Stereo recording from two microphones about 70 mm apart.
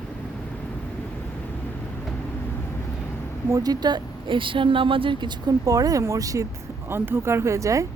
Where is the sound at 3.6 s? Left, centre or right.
Right.